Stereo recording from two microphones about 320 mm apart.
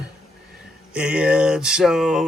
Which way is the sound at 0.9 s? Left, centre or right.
Centre.